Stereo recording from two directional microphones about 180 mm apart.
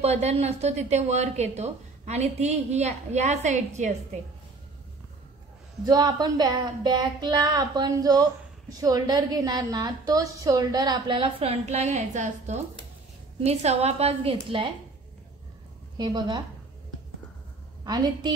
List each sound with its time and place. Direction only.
0.0 s speech: 35° right (ahead or behind)
5.9 s speech: 20° right (ahead or behind)
16.0 s speech: 25° right (ahead or behind)
17.8 s speech: 25° right (ahead or behind)